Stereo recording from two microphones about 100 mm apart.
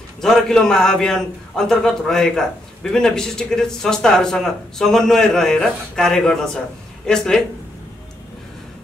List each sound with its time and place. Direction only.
0.2 s a man's voice: 5° left (ahead or behind)